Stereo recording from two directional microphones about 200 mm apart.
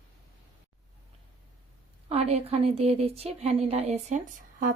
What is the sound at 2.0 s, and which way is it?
Speech, 30° right (ahead or behind).